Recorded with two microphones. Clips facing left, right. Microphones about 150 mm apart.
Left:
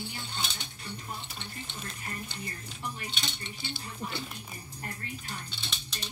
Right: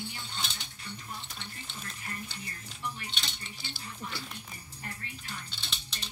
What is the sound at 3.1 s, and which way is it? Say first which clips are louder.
Speech: left 3 dB; 5° left (ahead or behind).